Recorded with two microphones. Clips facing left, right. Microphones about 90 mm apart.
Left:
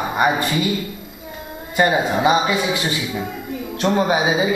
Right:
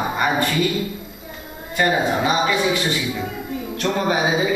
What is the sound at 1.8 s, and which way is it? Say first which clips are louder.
Speech: left 2 dB; 15° left (ahead or behind).